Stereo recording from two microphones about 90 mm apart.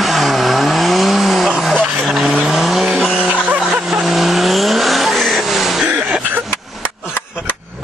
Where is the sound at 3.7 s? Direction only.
5° right (ahead or behind).